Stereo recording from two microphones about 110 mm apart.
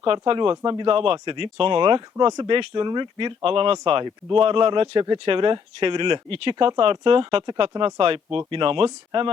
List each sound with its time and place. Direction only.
0.0 s speech: 50° right (ahead or behind)